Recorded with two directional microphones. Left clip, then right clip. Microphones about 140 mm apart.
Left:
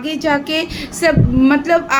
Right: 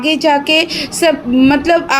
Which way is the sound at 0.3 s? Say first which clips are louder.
Right 4 dB; 45° right (ahead or behind).